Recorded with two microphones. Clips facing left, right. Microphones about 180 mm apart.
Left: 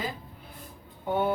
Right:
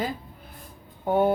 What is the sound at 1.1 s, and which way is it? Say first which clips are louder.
Speech: right 5 dB; 45° right (ahead or behind).